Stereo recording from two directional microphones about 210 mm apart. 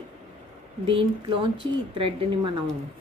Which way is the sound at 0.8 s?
25° right (ahead or behind).